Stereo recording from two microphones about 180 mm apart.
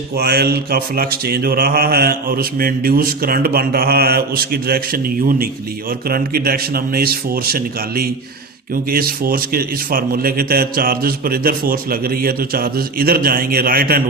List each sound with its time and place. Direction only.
0.2 s mantra: 60° right (ahead or behind)